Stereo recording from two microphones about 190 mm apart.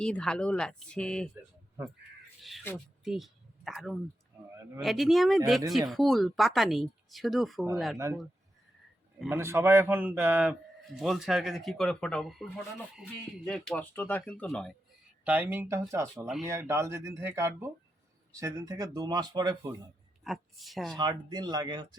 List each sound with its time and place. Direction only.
0.0 s a man's voice: 5° left (ahead or behind)
2.7 s a man's voice: centre (ahead or behind)
9.3 s a man's voice: 15° right (ahead or behind); by 14.7 s 5° left (ahead or behind)
15.2 s speech: 10° right (ahead or behind)
20.2 s a man's voice: centre (ahead or behind)
20.9 s speech: 20° right (ahead or behind)